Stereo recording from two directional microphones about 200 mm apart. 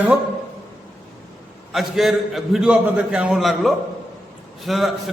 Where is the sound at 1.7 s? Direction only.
Centre (ahead or behind).